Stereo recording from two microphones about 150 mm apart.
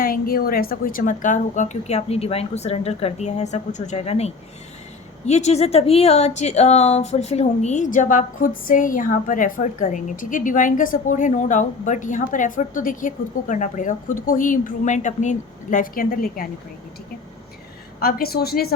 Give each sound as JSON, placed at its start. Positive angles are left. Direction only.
{"t": 0.0, "sound": "a woman's voice", "side_deg": 75}
{"t": 18.0, "sound": "a woman's voice", "side_deg": 90}